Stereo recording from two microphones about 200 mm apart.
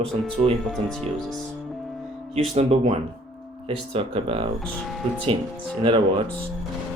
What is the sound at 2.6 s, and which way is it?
Speech, 30° right (ahead or behind).